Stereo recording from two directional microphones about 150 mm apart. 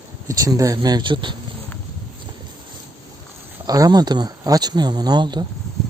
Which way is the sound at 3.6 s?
25° right (ahead or behind).